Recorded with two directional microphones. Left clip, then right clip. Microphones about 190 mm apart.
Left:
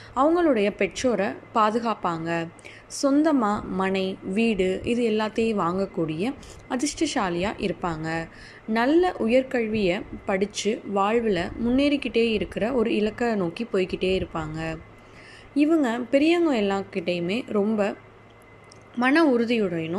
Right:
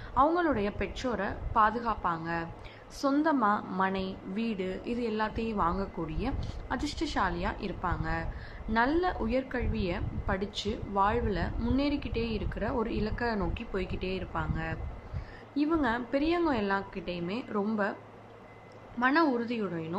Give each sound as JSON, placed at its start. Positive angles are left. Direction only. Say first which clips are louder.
{"t": 0.1, "sound": "a woman's voice", "louder": "left 6 dB", "side_deg": 15}
{"t": 18.9, "sound": "a woman's voice", "louder": "left 6 dB", "side_deg": 20}